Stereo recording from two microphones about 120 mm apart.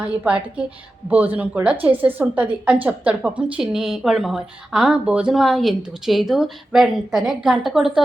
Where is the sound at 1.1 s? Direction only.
15° right (ahead or behind).